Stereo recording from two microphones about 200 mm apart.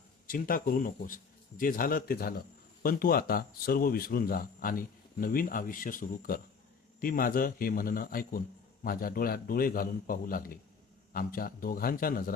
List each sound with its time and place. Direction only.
0.3 s speech: 45° left (ahead or behind)